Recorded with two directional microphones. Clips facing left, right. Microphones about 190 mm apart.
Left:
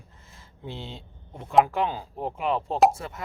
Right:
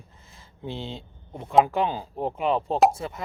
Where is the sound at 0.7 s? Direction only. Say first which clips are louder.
Right 4 dB; 25° right (ahead or behind).